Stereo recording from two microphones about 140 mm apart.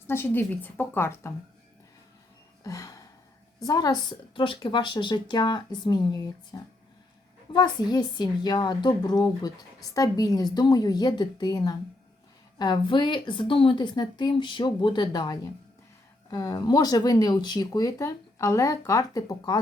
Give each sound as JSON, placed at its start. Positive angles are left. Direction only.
{"t": 0.1, "sound": "a woman's voice", "side_deg": 15}
{"t": 2.6, "sound": "a sound", "side_deg": 25}
{"t": 3.6, "sound": "a woman's voice", "side_deg": 25}